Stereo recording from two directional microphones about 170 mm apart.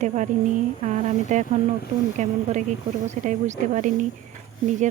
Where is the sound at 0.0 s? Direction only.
45° right (ahead or behind).